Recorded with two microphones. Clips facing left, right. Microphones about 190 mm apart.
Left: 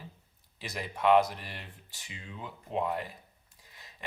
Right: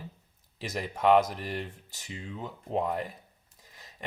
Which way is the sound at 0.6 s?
40° right (ahead or behind).